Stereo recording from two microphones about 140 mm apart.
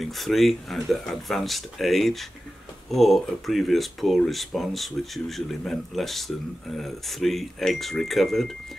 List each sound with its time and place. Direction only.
0.0 s speech: centre (ahead or behind)